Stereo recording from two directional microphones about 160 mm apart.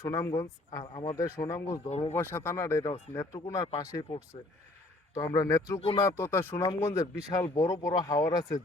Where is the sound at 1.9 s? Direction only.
40° left (ahead or behind).